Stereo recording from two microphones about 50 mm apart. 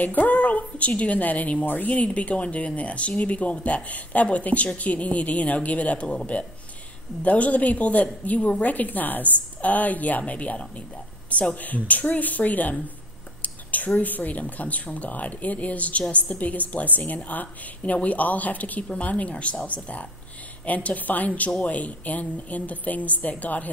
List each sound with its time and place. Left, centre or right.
0.0 s a woman's voice: left